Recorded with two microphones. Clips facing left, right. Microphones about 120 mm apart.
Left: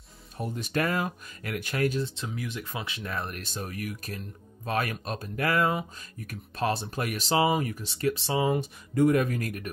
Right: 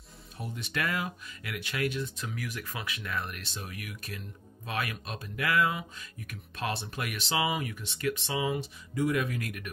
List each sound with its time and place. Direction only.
0.4 s speech: 40° left (ahead or behind)
2.1 s speech: 25° left (ahead or behind); by 9.7 s 40° left (ahead or behind)